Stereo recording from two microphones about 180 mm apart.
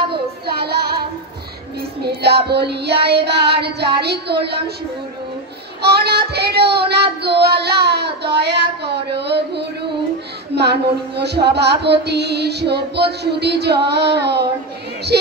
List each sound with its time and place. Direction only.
0.7 s child singing: 60° right (ahead or behind)
5.8 s child singing: 65° right (ahead or behind)
9.2 s music: 65° right (ahead or behind)